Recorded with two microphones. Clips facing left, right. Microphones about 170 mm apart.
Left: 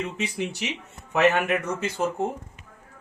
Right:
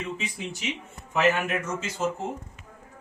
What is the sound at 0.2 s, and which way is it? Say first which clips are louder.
A man's voice: left 6 dB; 70° left (ahead or behind).